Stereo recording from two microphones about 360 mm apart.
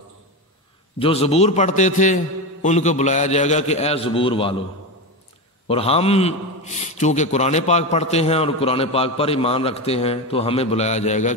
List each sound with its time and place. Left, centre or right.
0.9 s a man's voice: centre
5.7 s a man's voice: centre